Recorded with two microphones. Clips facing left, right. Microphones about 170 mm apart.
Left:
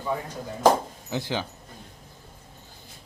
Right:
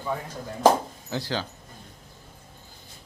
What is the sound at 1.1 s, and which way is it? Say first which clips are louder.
Speech: left 1 dB; 20° left (ahead or behind).